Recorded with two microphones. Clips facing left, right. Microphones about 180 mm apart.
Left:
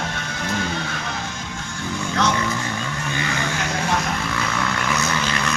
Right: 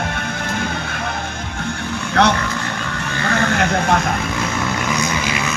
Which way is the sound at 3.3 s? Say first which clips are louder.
Right 11 dB; 60° right (ahead or behind).